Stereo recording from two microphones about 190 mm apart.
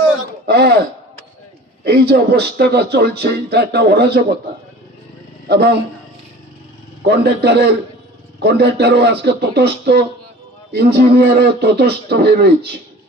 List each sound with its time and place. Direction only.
0.5 s a sound: 60° right (ahead or behind)
1.9 s speech: 60° right (ahead or behind)
5.5 s speech: 60° right (ahead or behind)
7.1 s speech: 60° right (ahead or behind)